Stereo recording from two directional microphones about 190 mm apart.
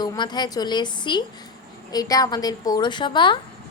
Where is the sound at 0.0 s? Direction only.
20° left (ahead or behind).